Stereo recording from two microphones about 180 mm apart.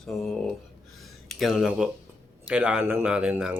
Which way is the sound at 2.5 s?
10° right (ahead or behind).